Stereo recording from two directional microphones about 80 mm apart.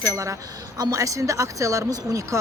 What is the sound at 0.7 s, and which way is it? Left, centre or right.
Speech, right.